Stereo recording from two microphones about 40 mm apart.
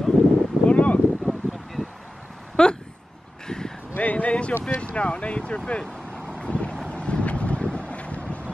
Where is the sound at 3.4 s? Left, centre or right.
Centre.